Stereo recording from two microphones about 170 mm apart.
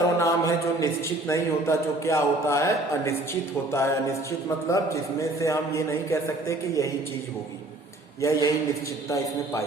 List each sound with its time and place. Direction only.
0.2 s a sound: 20° left (ahead or behind)
1.3 s a man's voice: 15° left (ahead or behind)
8.2 s a man's voice: 20° left (ahead or behind)